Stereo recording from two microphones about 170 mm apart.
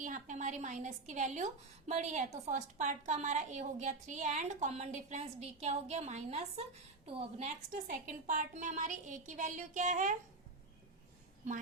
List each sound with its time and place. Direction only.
0.0 s a woman's voice: 50° right (ahead or behind)
7.7 s a woman's voice: 50° right (ahead or behind)